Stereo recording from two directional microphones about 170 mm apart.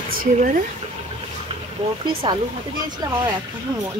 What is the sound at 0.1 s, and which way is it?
Speech, 55° right (ahead or behind).